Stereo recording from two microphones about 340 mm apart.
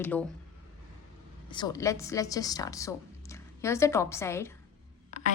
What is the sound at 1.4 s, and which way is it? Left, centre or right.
A woman's voice, centre.